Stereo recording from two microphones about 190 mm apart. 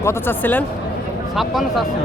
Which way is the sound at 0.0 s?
10° left (ahead or behind).